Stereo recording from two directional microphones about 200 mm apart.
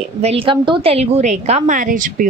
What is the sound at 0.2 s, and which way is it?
A woman's voice, 30° right (ahead or behind).